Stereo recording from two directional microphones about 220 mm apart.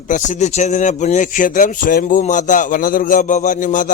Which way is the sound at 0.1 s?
35° left (ahead or behind).